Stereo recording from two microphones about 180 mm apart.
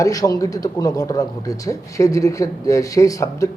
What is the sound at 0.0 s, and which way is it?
A man's voice, 20° left (ahead or behind).